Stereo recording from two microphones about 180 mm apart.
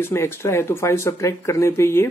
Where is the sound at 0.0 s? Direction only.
15° left (ahead or behind).